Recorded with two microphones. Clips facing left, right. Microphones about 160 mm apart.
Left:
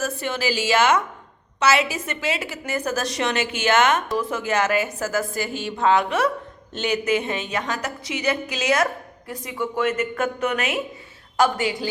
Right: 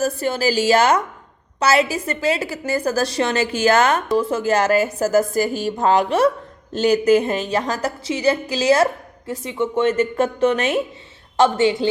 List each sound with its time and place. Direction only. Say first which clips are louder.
0.0 s a woman's voice: right 6 dB; 35° right (ahead or behind)